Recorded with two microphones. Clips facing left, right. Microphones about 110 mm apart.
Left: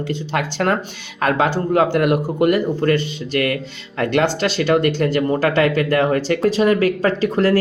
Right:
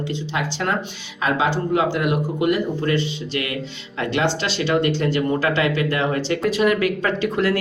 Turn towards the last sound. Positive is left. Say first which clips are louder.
# left 4 dB
turn(degrees=40)  # may be behind; listen again after turning